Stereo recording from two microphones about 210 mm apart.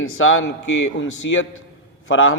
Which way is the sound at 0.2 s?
70° left (ahead or behind).